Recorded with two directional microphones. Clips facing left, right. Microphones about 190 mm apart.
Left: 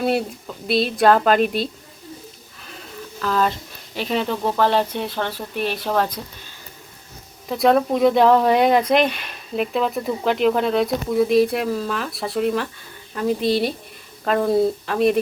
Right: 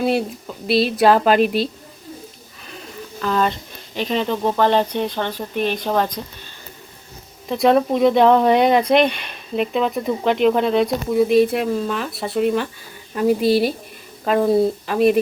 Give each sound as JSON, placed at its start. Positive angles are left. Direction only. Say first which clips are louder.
{"t": 0.0, "sound": "speech", "louder": "right 1 dB", "side_deg": 0}
{"t": 3.2, "sound": "speech", "louder": "right 1 dB", "side_deg": 0}
{"t": 7.4, "sound": "speech", "louder": "right 1 dB", "side_deg": 0}